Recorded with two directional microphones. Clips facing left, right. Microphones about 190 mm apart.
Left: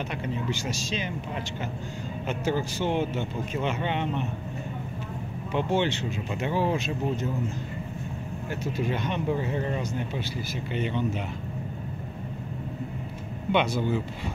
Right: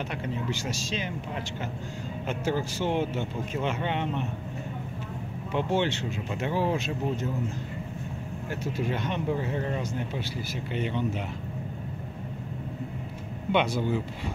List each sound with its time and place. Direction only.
0.1 s speech: 5° right (ahead or behind)
2.2 s speech: 5° right (ahead or behind)
5.5 s speech: centre (ahead or behind)
8.5 s speech: centre (ahead or behind)
13.5 s speech: 10° right (ahead or behind)